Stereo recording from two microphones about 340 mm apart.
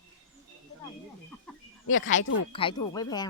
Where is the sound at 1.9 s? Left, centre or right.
Left.